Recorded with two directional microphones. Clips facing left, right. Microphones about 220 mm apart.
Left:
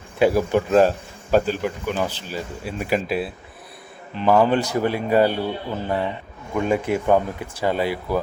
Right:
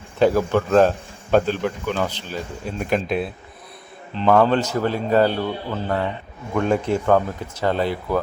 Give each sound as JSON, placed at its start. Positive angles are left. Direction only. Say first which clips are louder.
{"t": 0.2, "sound": "speech", "louder": "even", "side_deg": 10}